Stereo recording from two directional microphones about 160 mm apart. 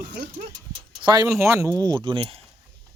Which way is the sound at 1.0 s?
25° right (ahead or behind).